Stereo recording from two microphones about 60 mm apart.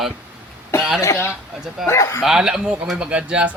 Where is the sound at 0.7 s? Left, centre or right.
Left.